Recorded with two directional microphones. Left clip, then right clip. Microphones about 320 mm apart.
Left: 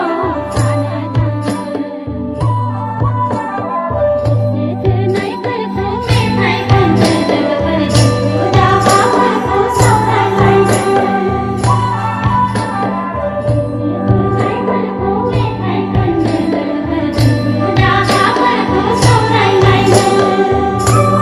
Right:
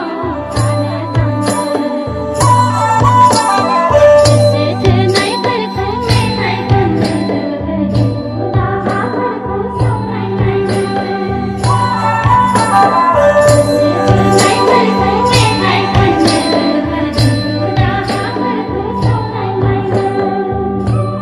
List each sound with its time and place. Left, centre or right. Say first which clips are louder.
3.9 s music: right 9 dB; right
6.7 s music: left 2 dB; centre
14.3 s music: right 8 dB; right
16.0 s music: right 2 dB; centre
19.5 s music: left 5 dB; left